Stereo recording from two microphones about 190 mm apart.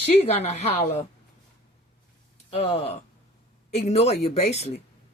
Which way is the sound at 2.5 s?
35° left (ahead or behind).